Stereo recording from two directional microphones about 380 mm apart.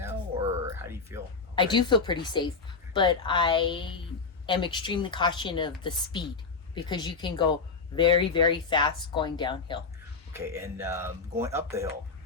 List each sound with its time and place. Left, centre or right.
0.0 s a sound: centre
1.5 s speech: centre
10.3 s speech: centre